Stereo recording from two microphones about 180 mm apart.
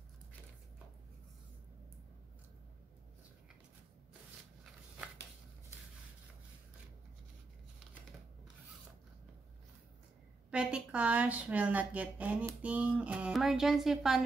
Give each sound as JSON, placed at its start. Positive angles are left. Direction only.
{"t": 10.5, "sound": "speech", "side_deg": -5}